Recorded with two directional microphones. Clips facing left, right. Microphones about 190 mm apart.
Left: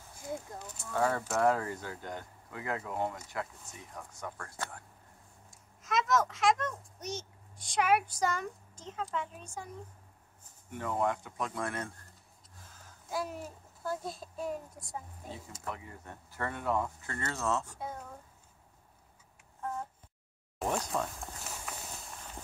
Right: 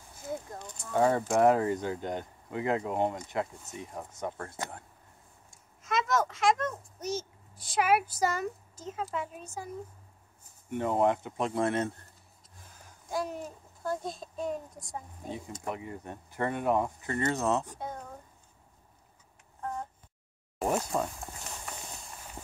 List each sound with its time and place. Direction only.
0.7 s speech: 20° right (ahead or behind)
5.5 s a child's voice: centre (ahead or behind)
10.7 s speech: 25° right (ahead or behind)
13.1 s a child's voice: 5° left (ahead or behind)
15.6 s speech: 20° right (ahead or behind)
17.7 s speech: 5° left (ahead or behind)
20.6 s speech: 15° right (ahead or behind)
20.9 s clip-clop: centre (ahead or behind)